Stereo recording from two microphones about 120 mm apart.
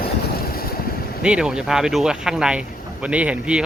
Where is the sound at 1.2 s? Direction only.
5° right (ahead or behind).